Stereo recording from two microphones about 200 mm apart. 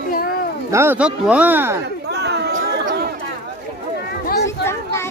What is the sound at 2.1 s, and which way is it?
Chatter, 55° right (ahead or behind).